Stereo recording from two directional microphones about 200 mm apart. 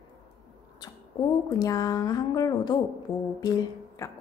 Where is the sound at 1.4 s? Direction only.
15° left (ahead or behind).